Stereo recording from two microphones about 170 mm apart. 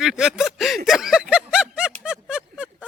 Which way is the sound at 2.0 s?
5° right (ahead or behind).